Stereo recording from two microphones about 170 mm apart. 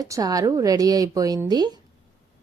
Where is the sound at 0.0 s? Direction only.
20° right (ahead or behind).